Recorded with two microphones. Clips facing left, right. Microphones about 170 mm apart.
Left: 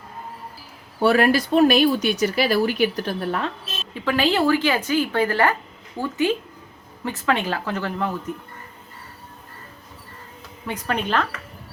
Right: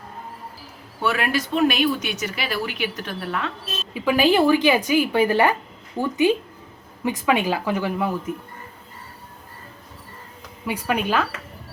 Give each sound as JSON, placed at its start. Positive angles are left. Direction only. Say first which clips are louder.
{"t": 1.0, "sound": "speech", "louder": "left 6 dB", "side_deg": 35}
{"t": 3.9, "sound": "a woman's voice", "louder": "right 3 dB", "side_deg": -10}
{"t": 10.7, "sound": "a woman's voice", "louder": "right 2 dB", "side_deg": -10}